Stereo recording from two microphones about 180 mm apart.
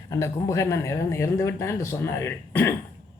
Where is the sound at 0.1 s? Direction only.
15° left (ahead or behind).